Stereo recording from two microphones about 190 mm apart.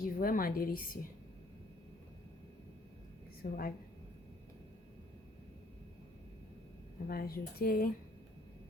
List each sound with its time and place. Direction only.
0.0 s a woman's voice: 50° left (ahead or behind)
3.4 s a woman's voice: 50° left (ahead or behind)
7.1 s a woman's voice: 50° left (ahead or behind)